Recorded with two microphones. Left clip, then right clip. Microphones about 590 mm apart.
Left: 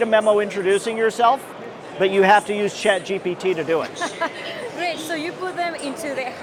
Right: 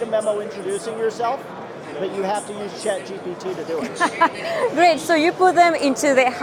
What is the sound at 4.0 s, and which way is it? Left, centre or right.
Speech, right.